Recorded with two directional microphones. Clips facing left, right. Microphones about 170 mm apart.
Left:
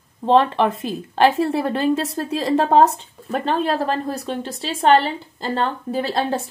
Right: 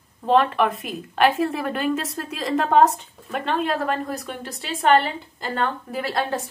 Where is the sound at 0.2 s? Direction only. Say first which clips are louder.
Left 3 dB; 30° left (ahead or behind).